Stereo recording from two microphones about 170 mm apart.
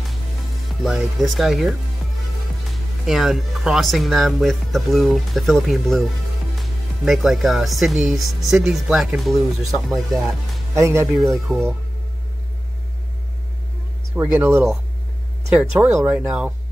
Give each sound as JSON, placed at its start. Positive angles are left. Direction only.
{"t": 0.8, "sound": "speech", "side_deg": 0}
{"t": 3.1, "sound": "speech", "side_deg": 0}
{"t": 10.7, "sound": "speech", "side_deg": -15}
{"t": 11.1, "sound": "speech", "side_deg": 0}
{"t": 14.1, "sound": "speech", "side_deg": -15}
{"t": 16.1, "sound": "speech", "side_deg": -5}